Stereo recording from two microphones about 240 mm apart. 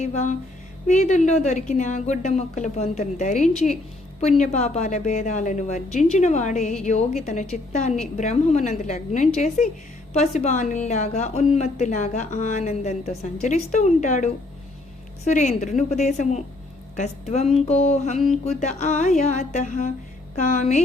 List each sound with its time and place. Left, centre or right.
0.0 s a woman's voice: left